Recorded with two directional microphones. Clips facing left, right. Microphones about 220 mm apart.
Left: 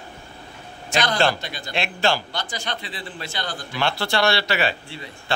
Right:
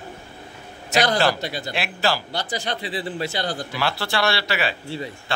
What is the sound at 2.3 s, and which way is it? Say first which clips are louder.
A man's voice: right 3 dB; 35° right (ahead or behind).